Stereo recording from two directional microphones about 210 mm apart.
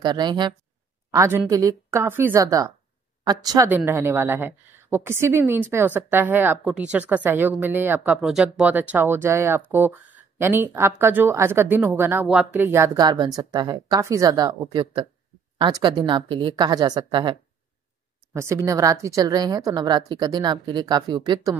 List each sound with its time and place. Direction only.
0.0 s a woman's voice: 20° right (ahead or behind)